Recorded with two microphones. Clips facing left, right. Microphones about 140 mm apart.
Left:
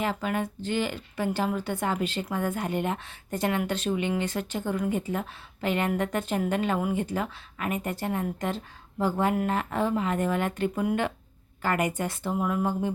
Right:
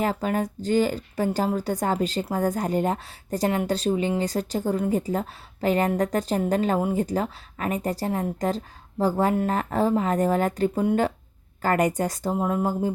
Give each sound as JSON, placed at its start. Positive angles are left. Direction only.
{"t": 0.0, "sound": "a woman's voice", "side_deg": -40}